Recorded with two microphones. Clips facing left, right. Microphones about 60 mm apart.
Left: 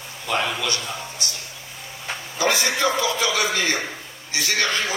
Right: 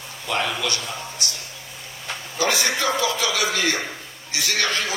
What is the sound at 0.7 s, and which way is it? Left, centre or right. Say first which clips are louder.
A man's voice: even; left.